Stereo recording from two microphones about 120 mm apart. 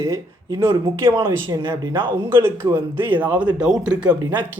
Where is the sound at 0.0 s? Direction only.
25° right (ahead or behind).